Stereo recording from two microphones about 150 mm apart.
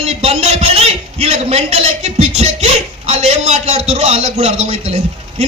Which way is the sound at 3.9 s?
40° right (ahead or behind).